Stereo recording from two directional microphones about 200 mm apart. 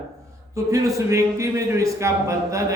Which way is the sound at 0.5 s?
15° right (ahead or behind).